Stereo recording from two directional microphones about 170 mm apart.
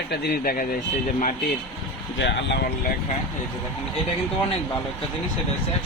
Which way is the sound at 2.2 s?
90° left.